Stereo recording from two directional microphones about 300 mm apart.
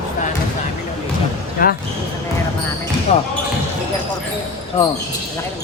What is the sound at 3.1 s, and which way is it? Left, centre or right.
Speech, left.